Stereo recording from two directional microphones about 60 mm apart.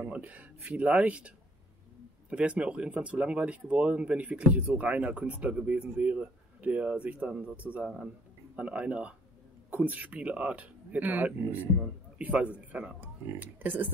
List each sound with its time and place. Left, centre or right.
0.0 s speech: right